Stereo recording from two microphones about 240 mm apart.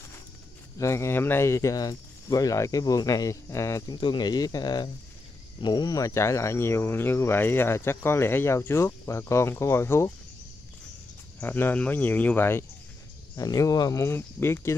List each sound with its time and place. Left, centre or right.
0.7 s speech: centre
11.3 s speech: centre